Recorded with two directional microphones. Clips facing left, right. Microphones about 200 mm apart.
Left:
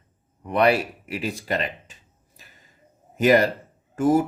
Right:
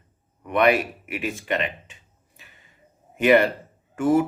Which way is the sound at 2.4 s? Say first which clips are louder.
Even; 40° left (ahead or behind).